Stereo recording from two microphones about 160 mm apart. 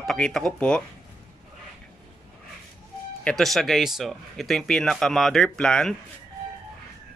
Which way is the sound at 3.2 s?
Centre (ahead or behind).